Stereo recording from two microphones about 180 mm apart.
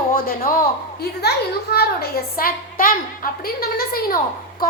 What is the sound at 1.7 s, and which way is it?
A woman's voice, 60° left (ahead or behind).